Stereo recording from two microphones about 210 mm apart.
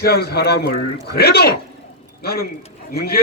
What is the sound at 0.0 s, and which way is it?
A man's voice, 50° left (ahead or behind).